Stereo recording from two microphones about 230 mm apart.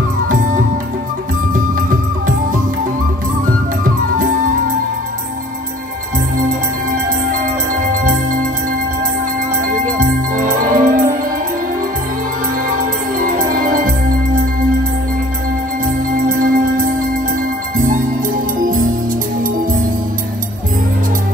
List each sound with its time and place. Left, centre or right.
0.3 s music: right
9.0 s music: right
13.2 s music: right
19.4 s music: right